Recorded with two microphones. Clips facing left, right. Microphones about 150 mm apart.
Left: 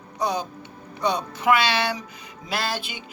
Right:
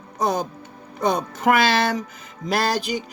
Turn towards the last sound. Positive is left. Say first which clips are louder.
# right 7 dB
turn(degrees=-40)  # may be behind; listen again after turning